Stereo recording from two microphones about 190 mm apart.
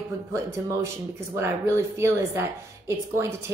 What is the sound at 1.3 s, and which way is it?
A woman's voice, 15° right (ahead or behind).